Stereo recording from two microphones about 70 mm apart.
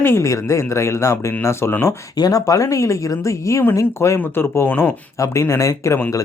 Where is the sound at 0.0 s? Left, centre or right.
Left.